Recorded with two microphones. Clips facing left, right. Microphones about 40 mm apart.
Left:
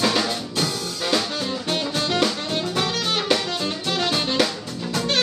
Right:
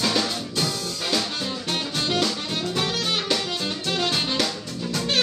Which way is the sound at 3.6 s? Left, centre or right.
Centre.